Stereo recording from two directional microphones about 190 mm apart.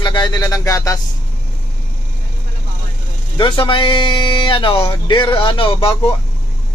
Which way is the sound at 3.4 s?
25° left (ahead or behind).